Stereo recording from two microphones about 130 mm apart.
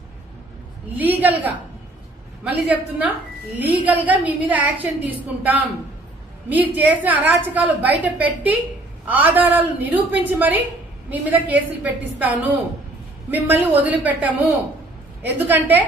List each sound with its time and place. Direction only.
0.9 s a woman's voice: 15° right (ahead or behind)